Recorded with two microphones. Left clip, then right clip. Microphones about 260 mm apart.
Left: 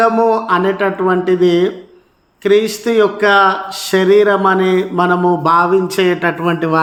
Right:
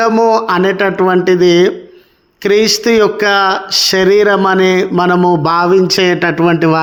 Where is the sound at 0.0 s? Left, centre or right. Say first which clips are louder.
Right 2 dB; right.